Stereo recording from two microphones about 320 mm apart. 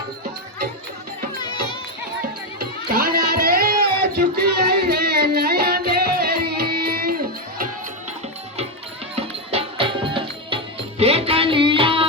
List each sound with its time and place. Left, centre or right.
2.2 s music: right
9.1 s music: centre